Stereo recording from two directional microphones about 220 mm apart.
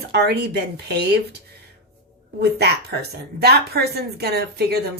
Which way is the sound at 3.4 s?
45° right (ahead or behind).